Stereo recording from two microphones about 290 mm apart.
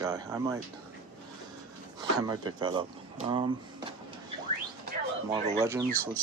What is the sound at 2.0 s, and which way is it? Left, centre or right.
Speech, centre.